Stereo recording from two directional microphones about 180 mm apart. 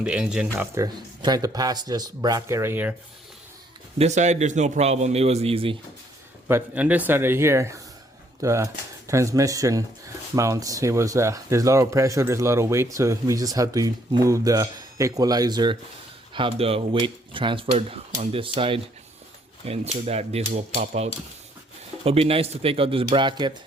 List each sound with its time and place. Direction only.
0.0 s speech: 5° right (ahead or behind)
0.5 s speech: 15° right (ahead or behind)
3.9 s a man's voice: 40° right (ahead or behind)
6.5 s a man's voice: 10° right (ahead or behind); by 23.5 s 25° right (ahead or behind)